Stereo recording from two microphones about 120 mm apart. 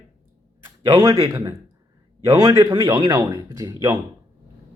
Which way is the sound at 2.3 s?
30° right (ahead or behind).